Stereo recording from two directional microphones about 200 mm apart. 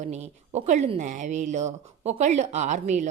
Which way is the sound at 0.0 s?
35° right (ahead or behind).